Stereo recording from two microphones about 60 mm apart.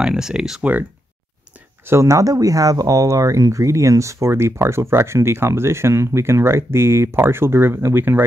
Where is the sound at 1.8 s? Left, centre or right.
Right.